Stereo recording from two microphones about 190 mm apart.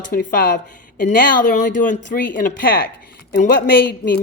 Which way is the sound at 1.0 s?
45° left (ahead or behind).